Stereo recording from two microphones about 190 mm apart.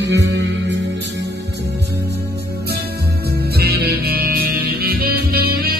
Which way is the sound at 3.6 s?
55° right (ahead or behind).